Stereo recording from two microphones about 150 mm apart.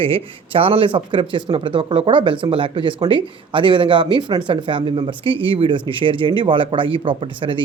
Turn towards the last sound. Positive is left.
turn(degrees=-35)  # may be behind; listen again after turning